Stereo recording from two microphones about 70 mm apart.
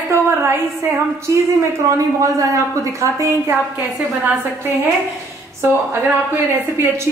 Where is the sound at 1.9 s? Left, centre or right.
Right.